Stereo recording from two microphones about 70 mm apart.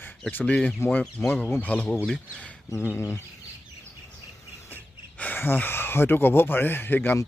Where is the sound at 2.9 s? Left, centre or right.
Left.